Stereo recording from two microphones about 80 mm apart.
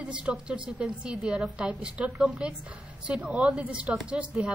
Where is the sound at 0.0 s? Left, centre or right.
Centre.